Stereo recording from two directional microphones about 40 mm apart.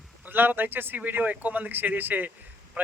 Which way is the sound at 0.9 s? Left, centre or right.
Right.